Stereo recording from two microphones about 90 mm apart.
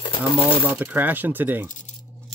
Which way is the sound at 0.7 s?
20° right (ahead or behind).